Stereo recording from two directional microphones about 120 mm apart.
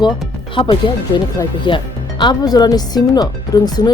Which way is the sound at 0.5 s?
45° left (ahead or behind).